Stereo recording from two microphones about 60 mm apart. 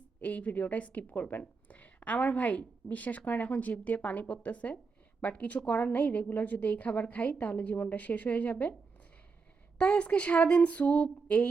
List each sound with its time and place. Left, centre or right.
0.2 s a woman's voice: left
9.7 s a woman's voice: centre